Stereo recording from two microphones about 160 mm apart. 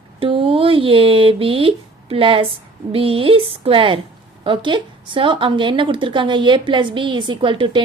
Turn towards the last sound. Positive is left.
turn(degrees=-30)  # may be behind; listen again after turning